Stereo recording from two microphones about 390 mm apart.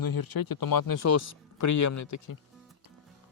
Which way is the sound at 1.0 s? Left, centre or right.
Left.